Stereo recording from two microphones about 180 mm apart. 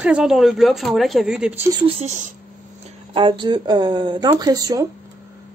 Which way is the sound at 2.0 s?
45° right (ahead or behind).